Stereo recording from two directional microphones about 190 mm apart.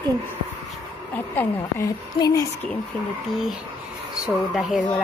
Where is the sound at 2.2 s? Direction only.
20° left (ahead or behind).